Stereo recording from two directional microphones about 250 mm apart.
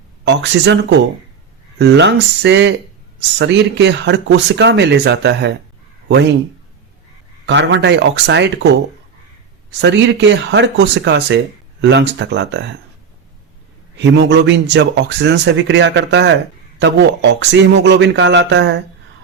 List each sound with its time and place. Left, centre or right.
0.3 s speech: right
7.4 s speech: right
9.8 s speech: right
14.0 s speech: right